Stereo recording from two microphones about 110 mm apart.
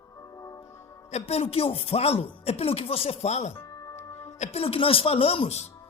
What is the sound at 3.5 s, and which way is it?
Music, 25° left (ahead or behind).